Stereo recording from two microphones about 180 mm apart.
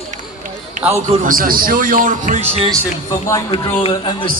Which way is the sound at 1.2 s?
50° right (ahead or behind).